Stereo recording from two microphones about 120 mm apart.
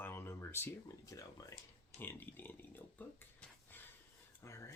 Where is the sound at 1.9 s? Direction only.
15° left (ahead or behind).